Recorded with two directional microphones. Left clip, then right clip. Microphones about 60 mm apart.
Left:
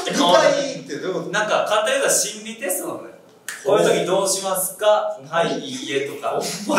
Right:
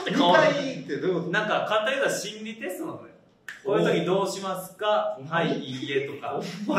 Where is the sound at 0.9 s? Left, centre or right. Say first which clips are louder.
Left 1 dB; centre.